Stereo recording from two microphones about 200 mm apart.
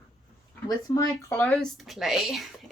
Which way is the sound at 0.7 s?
20° left (ahead or behind).